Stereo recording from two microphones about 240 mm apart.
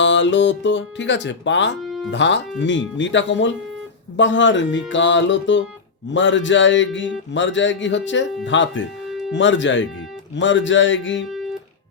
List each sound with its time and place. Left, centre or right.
0.0 s speech: left
1.8 s music: centre
2.0 s speech: left